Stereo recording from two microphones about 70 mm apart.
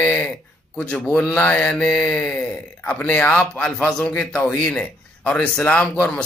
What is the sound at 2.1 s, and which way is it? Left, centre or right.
A man's voice, centre.